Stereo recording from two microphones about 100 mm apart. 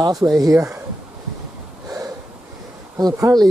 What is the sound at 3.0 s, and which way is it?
Speech, 35° right (ahead or behind).